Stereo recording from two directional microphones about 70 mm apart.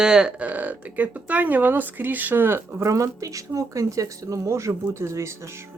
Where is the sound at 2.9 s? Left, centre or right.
Right.